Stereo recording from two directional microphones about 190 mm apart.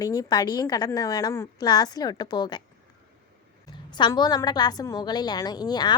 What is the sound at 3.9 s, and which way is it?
A woman's voice, 20° left (ahead or behind).